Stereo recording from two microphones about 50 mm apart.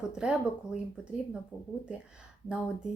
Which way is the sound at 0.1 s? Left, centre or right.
Centre.